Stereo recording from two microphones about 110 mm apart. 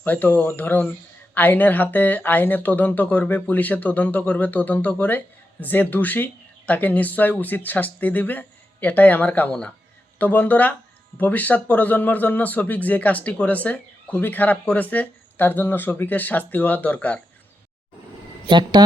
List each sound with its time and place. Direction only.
0.0 s speech: 15° left (ahead or behind)
18.4 s speech: 45° right (ahead or behind)